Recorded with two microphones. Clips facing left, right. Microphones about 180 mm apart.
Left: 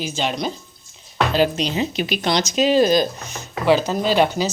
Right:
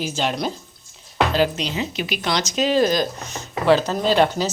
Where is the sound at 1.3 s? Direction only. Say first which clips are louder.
Left 2 dB; 25° left (ahead or behind).